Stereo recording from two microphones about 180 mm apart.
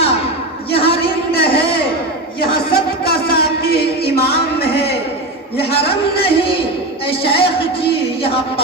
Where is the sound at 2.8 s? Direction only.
60° left (ahead or behind).